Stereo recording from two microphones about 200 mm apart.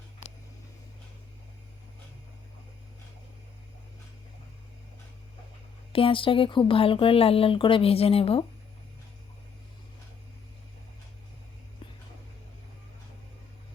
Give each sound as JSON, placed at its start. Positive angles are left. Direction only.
{"t": 5.9, "sound": "speech", "side_deg": 25}